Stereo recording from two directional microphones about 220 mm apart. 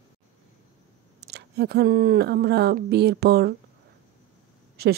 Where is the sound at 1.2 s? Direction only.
45° right (ahead or behind).